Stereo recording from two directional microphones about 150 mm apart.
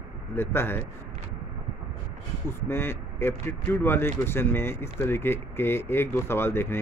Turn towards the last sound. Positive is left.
turn(degrees=15)  # may be behind; listen again after turning